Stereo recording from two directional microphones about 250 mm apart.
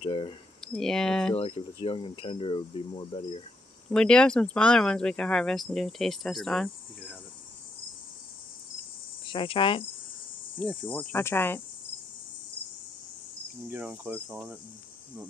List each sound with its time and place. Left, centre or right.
0.0 s speech: centre
0.7 s speech: centre
1.3 s speech: left
3.9 s speech: centre
9.2 s cricket: centre
10.6 s cricket: centre
13.7 s speech: centre